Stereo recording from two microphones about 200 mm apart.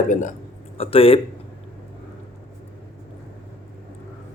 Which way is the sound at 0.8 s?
30° left (ahead or behind).